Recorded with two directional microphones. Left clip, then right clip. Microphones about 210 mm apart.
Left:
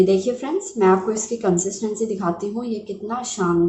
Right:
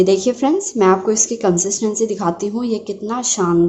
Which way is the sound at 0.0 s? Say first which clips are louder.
Right 4 dB; 50° right (ahead or behind).